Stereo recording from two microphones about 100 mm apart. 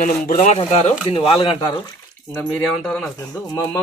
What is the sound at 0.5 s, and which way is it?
Speech, 80° left.